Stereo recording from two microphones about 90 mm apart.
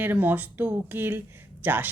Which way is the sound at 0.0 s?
20° right (ahead or behind).